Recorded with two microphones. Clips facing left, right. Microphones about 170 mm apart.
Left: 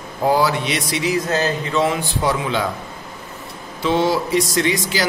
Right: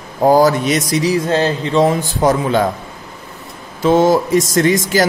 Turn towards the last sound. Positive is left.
turn(degrees=-45)  # may be behind; listen again after turning